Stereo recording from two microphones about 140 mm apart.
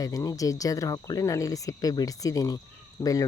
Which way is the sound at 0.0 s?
25° left (ahead or behind).